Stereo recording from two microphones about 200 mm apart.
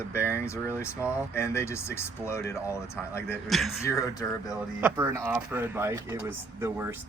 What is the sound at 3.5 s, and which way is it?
Speech, centre (ahead or behind).